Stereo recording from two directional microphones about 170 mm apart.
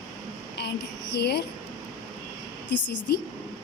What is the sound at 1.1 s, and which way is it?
Speech, 75° left (ahead or behind).